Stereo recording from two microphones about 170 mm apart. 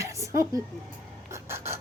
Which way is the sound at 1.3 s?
15° right (ahead or behind).